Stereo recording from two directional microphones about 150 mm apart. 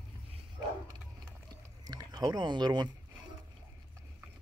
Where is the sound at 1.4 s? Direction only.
25° right (ahead or behind).